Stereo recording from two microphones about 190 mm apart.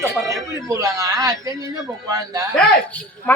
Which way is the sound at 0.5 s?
20° right (ahead or behind).